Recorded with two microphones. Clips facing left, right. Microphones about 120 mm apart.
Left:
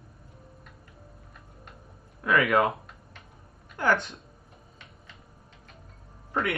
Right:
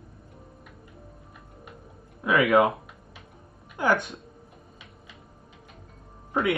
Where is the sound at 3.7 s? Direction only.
15° right (ahead or behind).